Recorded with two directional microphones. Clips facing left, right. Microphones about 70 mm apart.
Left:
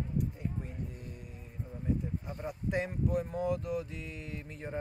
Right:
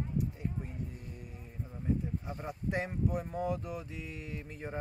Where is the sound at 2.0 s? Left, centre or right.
Centre.